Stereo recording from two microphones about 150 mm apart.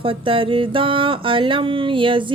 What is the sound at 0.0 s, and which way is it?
Music, 35° right (ahead or behind).